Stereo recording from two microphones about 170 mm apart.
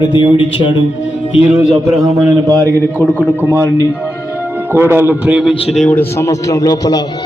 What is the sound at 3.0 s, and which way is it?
Speech, 5° left (ahead or behind).